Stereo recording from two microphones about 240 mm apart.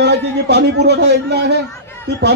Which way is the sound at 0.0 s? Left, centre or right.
Right.